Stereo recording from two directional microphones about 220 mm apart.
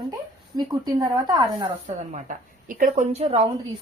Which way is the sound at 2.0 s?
35° right (ahead or behind).